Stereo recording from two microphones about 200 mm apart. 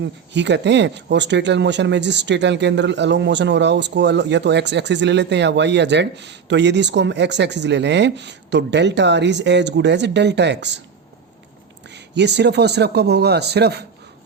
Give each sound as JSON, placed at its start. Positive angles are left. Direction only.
{"t": 0.0, "sound": "speech", "side_deg": -60}
{"t": 12.1, "sound": "speech", "side_deg": -60}